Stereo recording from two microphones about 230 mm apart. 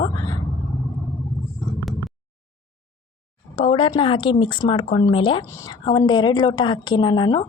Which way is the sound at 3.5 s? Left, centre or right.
Left.